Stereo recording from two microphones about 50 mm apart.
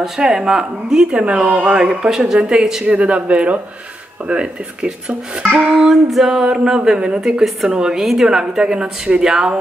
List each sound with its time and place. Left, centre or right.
0.0 s speech: centre
1.3 s speech: right
1.8 s speech: centre
2.8 s speech: right
5.8 s speech: centre